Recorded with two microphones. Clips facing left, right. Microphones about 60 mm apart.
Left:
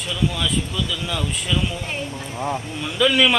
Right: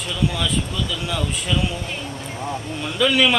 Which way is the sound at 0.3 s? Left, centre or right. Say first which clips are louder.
Even; centre.